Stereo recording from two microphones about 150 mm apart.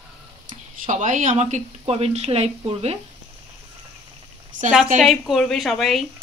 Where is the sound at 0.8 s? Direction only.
55° right (ahead or behind).